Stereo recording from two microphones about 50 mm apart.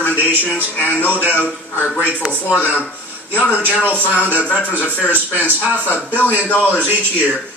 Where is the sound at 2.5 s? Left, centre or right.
Left.